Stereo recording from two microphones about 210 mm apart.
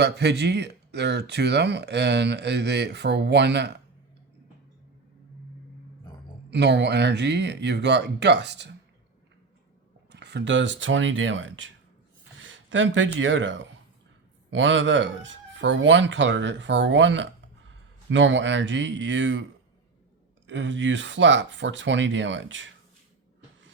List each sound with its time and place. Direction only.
0.0 s speech: 55° right (ahead or behind)
6.5 s speech: 55° right (ahead or behind)
10.1 s speech: 55° right (ahead or behind)
20.5 s speech: 60° right (ahead or behind)